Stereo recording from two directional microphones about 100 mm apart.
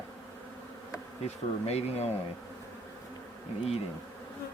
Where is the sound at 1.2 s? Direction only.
90° left.